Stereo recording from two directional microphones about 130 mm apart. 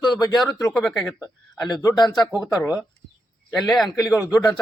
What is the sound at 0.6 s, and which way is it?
Speech, 5° left (ahead or behind).